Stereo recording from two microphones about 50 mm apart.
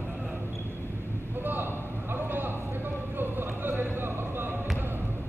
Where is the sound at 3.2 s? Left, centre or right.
Right.